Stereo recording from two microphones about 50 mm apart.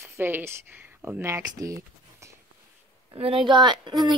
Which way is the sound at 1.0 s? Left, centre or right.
Right.